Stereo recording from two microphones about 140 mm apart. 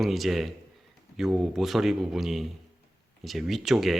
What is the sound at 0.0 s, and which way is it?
Speech, centre (ahead or behind).